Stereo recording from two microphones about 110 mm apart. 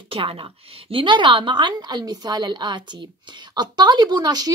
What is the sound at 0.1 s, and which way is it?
A woman's voice, 55° right (ahead or behind).